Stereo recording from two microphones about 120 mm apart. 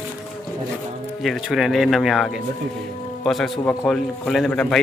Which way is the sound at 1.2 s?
Centre (ahead or behind).